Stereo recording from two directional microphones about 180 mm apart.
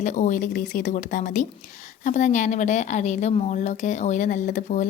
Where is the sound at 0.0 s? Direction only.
40° left (ahead or behind).